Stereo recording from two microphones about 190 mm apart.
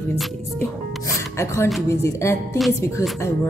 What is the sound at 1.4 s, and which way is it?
Speech, 15° left (ahead or behind).